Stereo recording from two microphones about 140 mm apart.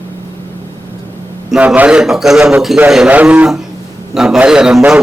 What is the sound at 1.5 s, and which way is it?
A man's voice, 10° right (ahead or behind).